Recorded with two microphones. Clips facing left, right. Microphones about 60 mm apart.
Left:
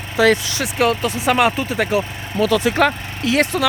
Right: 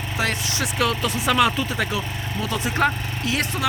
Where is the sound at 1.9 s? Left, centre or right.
Left.